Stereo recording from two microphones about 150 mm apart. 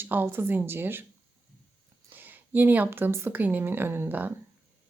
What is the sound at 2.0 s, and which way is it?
Speech, 15° right (ahead or behind).